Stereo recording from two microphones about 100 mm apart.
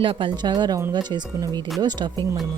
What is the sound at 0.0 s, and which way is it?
Speech, 60° right (ahead or behind).